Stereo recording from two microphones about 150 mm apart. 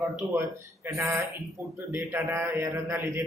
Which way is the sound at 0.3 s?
20° right (ahead or behind).